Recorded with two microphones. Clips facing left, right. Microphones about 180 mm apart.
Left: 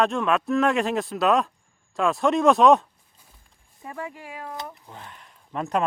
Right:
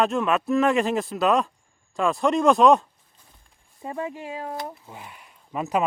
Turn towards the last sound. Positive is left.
turn(degrees=-5)  # may be behind; listen again after turning